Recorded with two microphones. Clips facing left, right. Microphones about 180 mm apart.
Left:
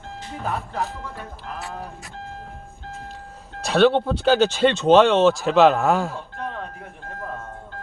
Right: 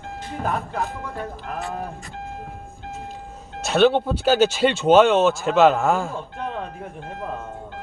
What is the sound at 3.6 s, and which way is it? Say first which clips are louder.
Speech: even; centre (ahead or behind).